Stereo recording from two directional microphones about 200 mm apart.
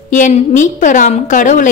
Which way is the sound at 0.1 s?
40° left (ahead or behind).